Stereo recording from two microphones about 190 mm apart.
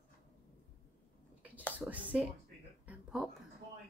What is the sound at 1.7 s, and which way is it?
Speech, 10° right (ahead or behind).